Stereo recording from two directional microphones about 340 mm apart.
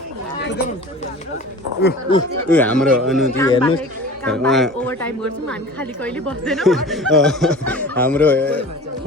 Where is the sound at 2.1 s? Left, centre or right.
Centre.